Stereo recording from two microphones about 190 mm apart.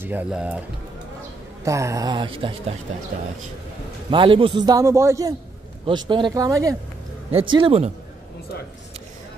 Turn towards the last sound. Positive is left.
turn(degrees=-30)  # may be behind; listen again after turning